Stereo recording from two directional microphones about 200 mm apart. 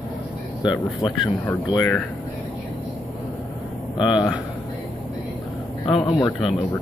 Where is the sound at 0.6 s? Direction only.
20° left (ahead or behind).